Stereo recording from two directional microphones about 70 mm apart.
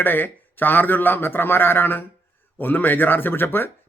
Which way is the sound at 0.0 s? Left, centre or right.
Left.